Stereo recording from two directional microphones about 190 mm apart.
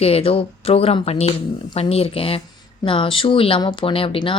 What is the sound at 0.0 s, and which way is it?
Speech, 30° left (ahead or behind).